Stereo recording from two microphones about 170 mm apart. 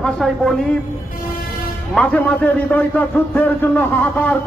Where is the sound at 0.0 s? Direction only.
Centre (ahead or behind).